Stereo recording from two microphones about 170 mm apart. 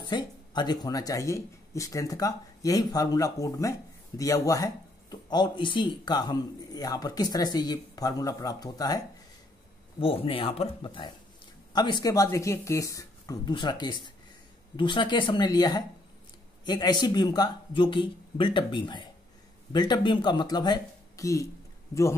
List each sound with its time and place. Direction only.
0.0 s speech: 25° left (ahead or behind)
9.9 s speech: 35° left (ahead or behind); by 21.5 s 20° left (ahead or behind)